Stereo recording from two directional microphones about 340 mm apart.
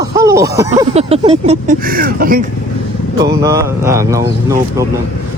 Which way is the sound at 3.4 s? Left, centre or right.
Centre.